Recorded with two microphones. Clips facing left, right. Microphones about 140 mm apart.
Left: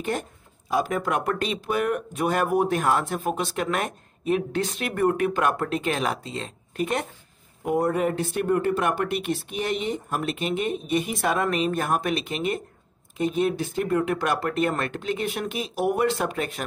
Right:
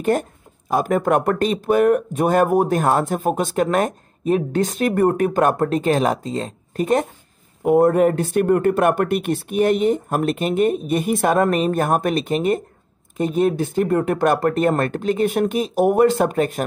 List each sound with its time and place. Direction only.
0.0 s speech: 50° right (ahead or behind)
7.6 s speech: 55° right (ahead or behind)